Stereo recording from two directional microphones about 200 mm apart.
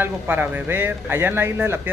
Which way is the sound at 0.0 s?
10° right (ahead or behind).